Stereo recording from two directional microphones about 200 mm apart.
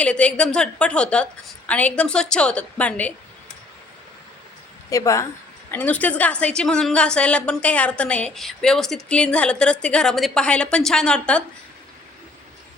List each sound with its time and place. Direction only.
0.0 s a woman's voice: 5° left (ahead or behind)
4.9 s a woman's voice: 15° left (ahead or behind)